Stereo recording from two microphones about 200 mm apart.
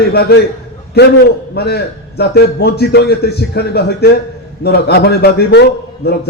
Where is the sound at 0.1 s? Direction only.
55° left (ahead or behind).